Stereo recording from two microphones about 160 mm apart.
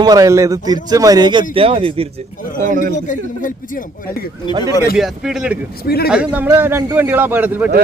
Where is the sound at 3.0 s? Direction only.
55° left (ahead or behind).